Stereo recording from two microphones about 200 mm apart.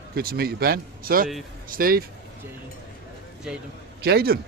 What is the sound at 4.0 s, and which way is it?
Speech, 50° right (ahead or behind).